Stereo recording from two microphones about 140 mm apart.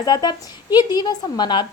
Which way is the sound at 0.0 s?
30° left (ahead or behind).